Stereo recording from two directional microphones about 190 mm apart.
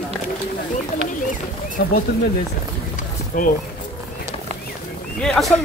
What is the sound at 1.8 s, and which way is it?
Speech, 60° left (ahead or behind).